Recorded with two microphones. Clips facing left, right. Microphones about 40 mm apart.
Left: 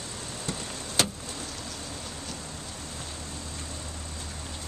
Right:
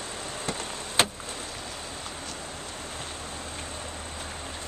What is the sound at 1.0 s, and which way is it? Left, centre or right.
Vehicle, right.